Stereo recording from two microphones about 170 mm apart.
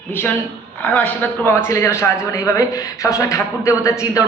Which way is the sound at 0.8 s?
5° left (ahead or behind).